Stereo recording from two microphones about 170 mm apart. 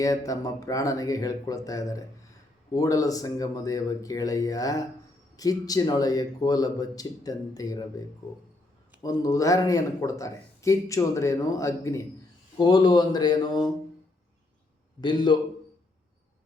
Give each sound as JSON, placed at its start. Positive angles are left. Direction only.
{"t": 0.0, "sound": "speech", "side_deg": 20}
{"t": 9.0, "sound": "speech", "side_deg": 20}
{"t": 15.0, "sound": "speech", "side_deg": 25}